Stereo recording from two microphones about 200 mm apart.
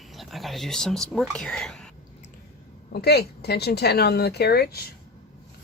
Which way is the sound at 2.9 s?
55° left (ahead or behind).